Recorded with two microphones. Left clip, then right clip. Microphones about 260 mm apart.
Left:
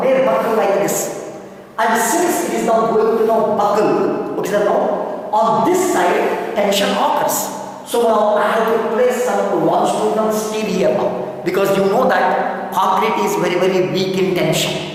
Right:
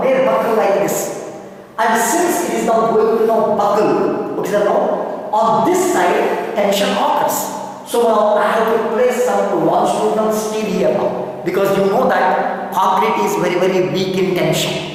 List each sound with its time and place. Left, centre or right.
0.0 s a sound: centre
1.8 s speech: centre
5.3 s speech: left
5.7 s speech: centre
8.1 s speech: left
8.4 s speech: centre
9.6 s speech: left
10.2 s a woman's voice: centre